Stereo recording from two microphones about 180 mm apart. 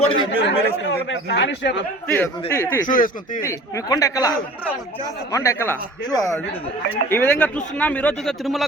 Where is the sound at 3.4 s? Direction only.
20° left (ahead or behind).